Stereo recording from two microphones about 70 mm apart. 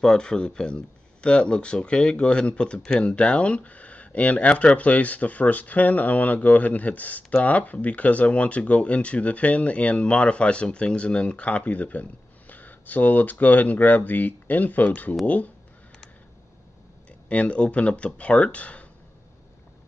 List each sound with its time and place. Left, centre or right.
0.0 s speech: centre
17.3 s speech: centre